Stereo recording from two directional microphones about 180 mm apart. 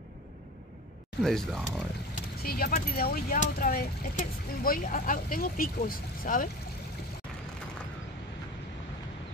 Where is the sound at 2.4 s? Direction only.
55° left (ahead or behind).